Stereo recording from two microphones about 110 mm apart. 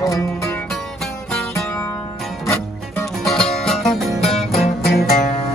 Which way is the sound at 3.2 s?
5° left (ahead or behind).